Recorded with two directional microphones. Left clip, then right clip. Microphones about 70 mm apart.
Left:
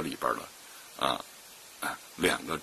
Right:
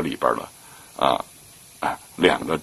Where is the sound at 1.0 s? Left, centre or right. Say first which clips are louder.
Right 10 dB; left.